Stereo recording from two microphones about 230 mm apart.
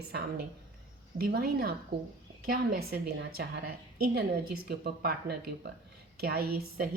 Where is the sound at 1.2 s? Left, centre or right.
Right.